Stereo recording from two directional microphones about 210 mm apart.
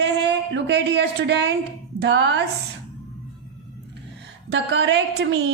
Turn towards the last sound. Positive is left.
turn(degrees=-55)  # may be behind; listen again after turning